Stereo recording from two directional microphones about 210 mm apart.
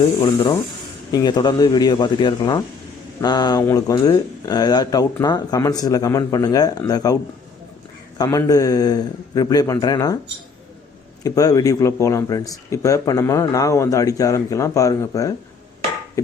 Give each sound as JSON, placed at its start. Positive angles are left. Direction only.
{"t": 0.2, "sound": "a man's voice", "side_deg": 15}
{"t": 8.2, "sound": "speech", "side_deg": 15}
{"t": 11.2, "sound": "speech", "side_deg": 15}